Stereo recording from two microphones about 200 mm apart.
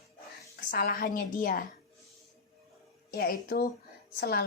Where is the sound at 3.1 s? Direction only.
50° left (ahead or behind).